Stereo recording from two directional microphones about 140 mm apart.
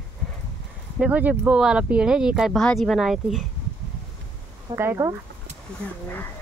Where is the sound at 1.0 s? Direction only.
10° right (ahead or behind).